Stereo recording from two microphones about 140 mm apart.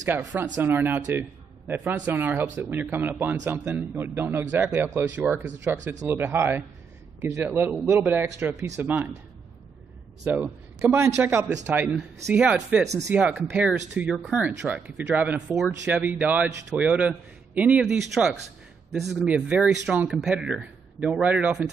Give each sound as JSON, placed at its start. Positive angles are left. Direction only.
{"t": 0.0, "sound": "speech", "side_deg": -15}
{"t": 10.2, "sound": "a man's voice", "side_deg": -10}